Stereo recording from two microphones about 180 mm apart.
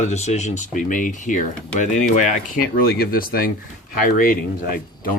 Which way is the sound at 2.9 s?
55° left (ahead or behind).